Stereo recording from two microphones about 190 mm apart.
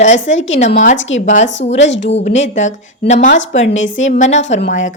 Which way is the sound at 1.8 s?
70° left (ahead or behind).